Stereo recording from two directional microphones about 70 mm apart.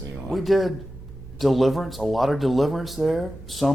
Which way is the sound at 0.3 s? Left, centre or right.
Centre.